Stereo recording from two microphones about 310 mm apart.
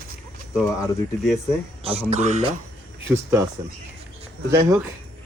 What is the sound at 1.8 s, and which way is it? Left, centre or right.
Speech, centre.